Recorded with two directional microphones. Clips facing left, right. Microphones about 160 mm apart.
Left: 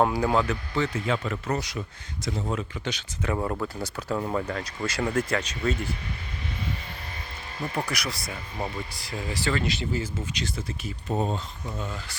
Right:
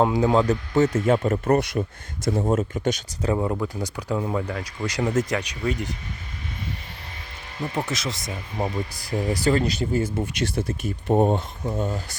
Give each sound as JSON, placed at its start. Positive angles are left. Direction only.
{"t": 0.0, "sound": "speech", "side_deg": -20}
{"t": 0.4, "sound": "speech", "side_deg": -40}
{"t": 3.3, "sound": "speech", "side_deg": -5}
{"t": 4.9, "sound": "speech", "side_deg": -20}
{"t": 7.7, "sound": "speech", "side_deg": -25}
{"t": 9.0, "sound": "speech", "side_deg": -45}
{"t": 11.7, "sound": "speech", "side_deg": -40}